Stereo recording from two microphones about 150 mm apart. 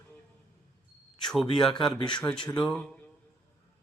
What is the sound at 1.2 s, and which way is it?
Speech, centre (ahead or behind).